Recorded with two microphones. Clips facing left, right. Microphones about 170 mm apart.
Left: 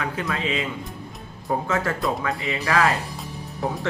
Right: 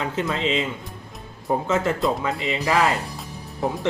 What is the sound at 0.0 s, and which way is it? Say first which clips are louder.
Speech: right 3 dB; 25° right (ahead or behind).